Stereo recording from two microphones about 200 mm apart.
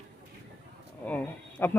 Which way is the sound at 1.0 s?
10° left (ahead or behind).